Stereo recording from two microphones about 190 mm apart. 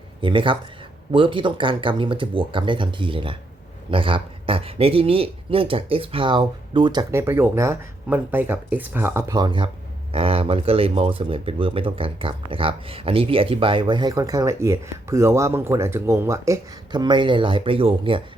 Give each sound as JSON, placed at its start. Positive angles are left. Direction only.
{"t": 0.2, "sound": "speech", "side_deg": -25}
{"t": 7.1, "sound": "speech", "side_deg": -15}